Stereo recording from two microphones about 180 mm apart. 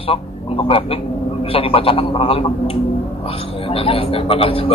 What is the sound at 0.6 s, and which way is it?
A man's voice, 30° left (ahead or behind).